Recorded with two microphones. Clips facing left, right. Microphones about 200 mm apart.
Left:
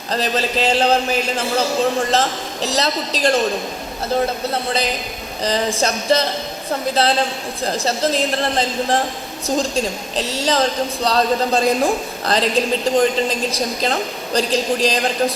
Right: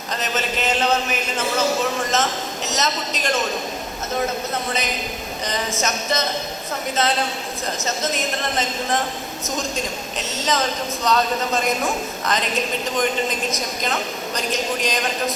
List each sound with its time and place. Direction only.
0.1 s a woman's voice: 35° left (ahead or behind)